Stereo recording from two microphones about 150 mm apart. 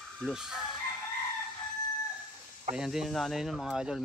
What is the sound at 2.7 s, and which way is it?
Speech, 5° right (ahead or behind).